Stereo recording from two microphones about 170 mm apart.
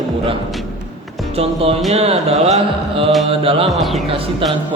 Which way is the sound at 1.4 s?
35° right (ahead or behind).